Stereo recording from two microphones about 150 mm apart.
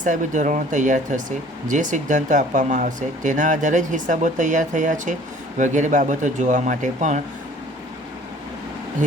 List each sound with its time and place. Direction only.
0.0 s speech: 55° right (ahead or behind)